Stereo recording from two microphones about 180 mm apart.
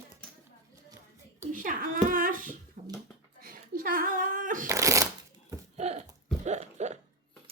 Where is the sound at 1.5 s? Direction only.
50° right (ahead or behind).